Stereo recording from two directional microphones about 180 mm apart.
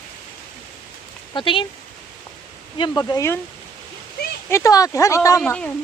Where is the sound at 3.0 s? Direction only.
20° left (ahead or behind).